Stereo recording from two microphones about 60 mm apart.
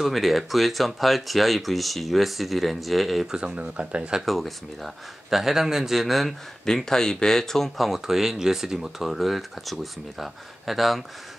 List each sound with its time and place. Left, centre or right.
0.0 s speech: centre
3.3 s speech: centre
4.3 s speech: centre